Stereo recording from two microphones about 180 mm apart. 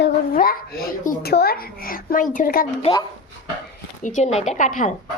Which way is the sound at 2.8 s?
30° left (ahead or behind).